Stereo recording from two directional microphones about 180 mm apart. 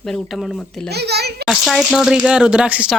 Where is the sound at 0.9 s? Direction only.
65° right (ahead or behind).